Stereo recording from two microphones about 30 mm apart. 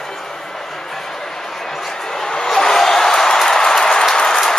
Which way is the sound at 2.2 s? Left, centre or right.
Centre.